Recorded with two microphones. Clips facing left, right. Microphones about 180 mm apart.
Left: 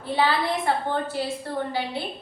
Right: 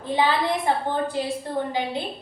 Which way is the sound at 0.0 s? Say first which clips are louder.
Right 1 dB; 15° right (ahead or behind).